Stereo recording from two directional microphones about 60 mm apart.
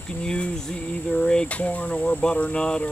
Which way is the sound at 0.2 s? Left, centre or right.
Centre.